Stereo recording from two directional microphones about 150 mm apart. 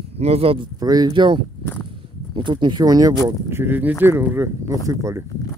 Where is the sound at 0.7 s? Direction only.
25° right (ahead or behind).